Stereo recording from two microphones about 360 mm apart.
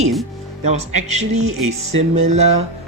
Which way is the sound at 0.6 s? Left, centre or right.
Right.